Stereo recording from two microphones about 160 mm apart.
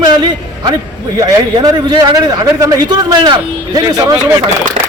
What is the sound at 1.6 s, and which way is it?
A man's voice, 25° right (ahead or behind).